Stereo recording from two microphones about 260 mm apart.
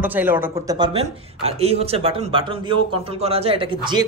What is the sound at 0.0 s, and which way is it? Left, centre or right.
A man's voice, centre.